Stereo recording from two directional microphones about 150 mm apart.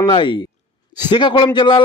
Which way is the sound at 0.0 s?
35° left (ahead or behind).